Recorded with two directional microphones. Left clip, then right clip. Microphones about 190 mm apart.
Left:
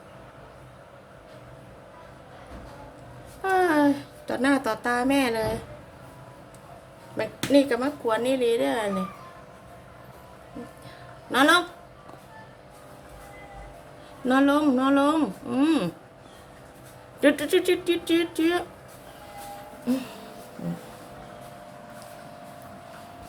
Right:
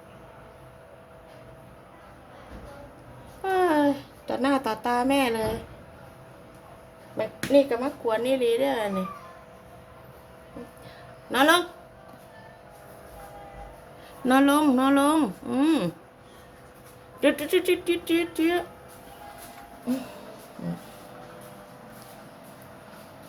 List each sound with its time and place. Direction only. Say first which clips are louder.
3.4 s a sound: left 1 dB; centre (ahead or behind)
7.2 s speech: right 1 dB; 10° left (ahead or behind)
11.3 s speech: left 1 dB; centre (ahead or behind)
14.3 s speech: right 1 dB; 20° right (ahead or behind)
17.2 s speech: left 2 dB; 5° left (ahead or behind)